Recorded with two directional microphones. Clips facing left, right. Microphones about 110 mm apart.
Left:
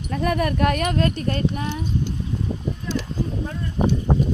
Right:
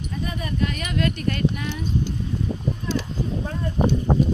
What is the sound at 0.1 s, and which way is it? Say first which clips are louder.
Speech: left 10 dB; 70° left (ahead or behind).